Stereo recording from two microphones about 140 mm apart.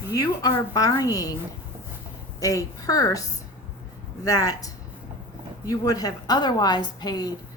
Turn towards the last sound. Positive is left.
turn(degrees=30)  # may be behind; listen again after turning